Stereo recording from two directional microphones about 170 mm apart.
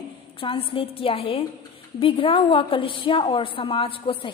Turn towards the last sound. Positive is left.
turn(degrees=30)  # may be behind; listen again after turning